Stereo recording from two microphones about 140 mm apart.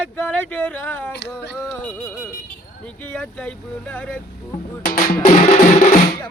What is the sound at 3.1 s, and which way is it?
Speech, 5° left (ahead or behind).